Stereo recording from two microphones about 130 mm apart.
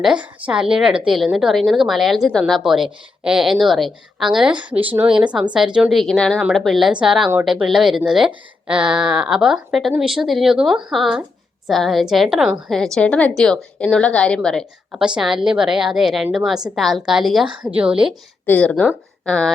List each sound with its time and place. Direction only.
0.0 s a woman's voice: 10° right (ahead or behind)
17.5 s a woman's voice: 35° right (ahead or behind)
17.7 s speech: 5° right (ahead or behind)
18.4 s speech: 10° left (ahead or behind)